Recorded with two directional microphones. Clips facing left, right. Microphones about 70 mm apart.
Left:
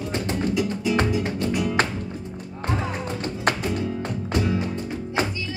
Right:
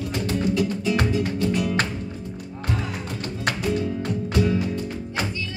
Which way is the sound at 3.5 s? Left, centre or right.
Left.